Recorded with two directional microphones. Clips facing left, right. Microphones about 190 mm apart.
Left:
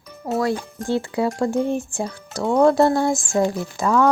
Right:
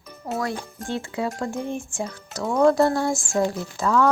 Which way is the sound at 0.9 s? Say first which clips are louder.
Left 6 dB; 35° left (ahead or behind).